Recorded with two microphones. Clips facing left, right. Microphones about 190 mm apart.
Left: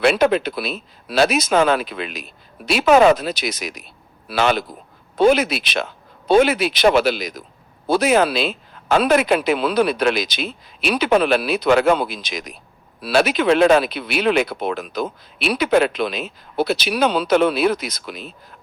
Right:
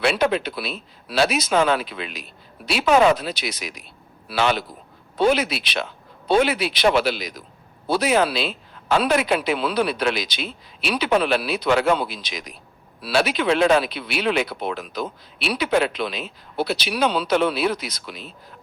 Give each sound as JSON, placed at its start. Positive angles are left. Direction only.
{"t": 0.0, "sound": "speech", "side_deg": 50}